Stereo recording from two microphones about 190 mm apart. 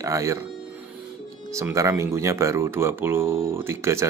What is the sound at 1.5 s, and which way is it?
Speech, 15° right (ahead or behind).